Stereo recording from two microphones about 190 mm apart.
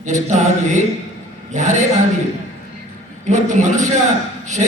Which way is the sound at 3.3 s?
40° right (ahead or behind).